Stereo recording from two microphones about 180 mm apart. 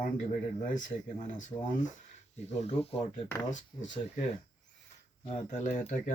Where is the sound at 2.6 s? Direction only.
35° left (ahead or behind).